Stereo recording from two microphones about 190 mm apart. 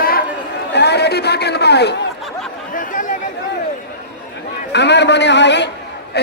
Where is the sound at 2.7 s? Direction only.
45° left (ahead or behind).